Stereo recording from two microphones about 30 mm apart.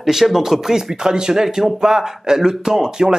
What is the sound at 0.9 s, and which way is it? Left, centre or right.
A man's voice, right.